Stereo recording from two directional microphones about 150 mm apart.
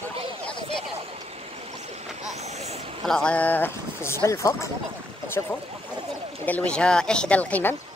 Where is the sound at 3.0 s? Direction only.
5° left (ahead or behind).